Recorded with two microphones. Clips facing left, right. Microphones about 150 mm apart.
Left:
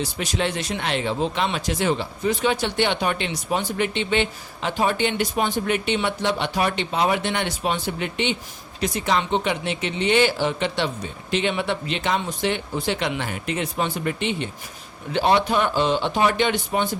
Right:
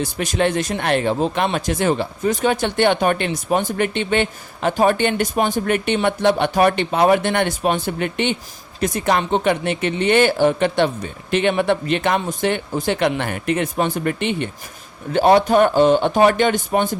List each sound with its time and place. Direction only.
0.0 s a man's voice: 50° right (ahead or behind)